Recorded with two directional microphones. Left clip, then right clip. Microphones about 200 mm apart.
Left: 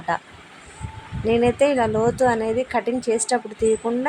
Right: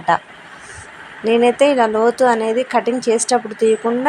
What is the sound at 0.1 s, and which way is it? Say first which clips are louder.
A woman's voice: right 8 dB; 15° right (ahead or behind).